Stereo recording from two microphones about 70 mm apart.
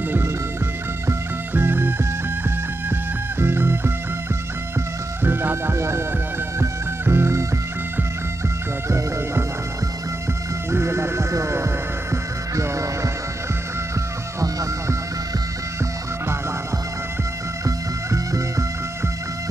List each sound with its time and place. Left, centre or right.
1.5 s music: right
5.2 s music: right
10.7 s music: right
14.4 s music: right
17.6 s music: right